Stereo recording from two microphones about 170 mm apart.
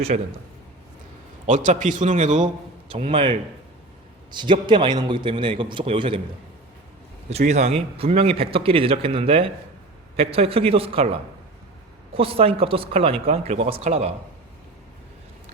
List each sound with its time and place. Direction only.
0.1 s a man's voice: 50° right (ahead or behind)
1.5 s a man's voice: 45° right (ahead or behind)
2.9 s a man's voice: 30° right (ahead or behind)
7.3 s a man's voice: 40° right (ahead or behind)